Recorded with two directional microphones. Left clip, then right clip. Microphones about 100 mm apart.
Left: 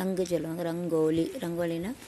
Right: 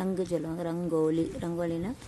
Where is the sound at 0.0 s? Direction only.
20° right (ahead or behind).